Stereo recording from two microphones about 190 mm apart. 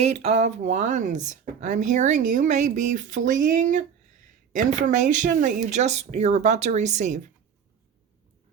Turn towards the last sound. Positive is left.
turn(degrees=-40)  # may be behind; listen again after turning